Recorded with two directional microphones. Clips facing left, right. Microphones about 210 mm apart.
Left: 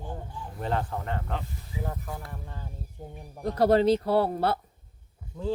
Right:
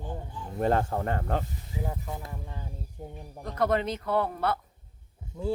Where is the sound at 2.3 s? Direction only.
10° right (ahead or behind).